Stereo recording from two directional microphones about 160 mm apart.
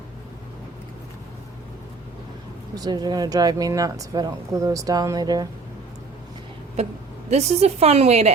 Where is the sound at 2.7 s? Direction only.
25° right (ahead or behind).